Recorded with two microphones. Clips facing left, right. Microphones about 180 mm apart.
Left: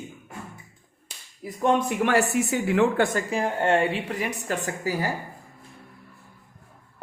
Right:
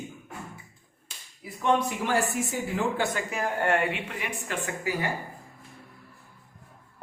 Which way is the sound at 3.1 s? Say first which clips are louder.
Left 4 dB; 25° left (ahead or behind).